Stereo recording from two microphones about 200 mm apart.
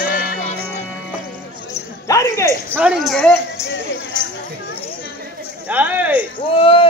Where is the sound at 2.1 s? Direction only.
15° left (ahead or behind).